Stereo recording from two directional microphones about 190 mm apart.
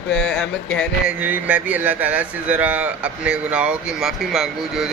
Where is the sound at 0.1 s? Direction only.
5° left (ahead or behind).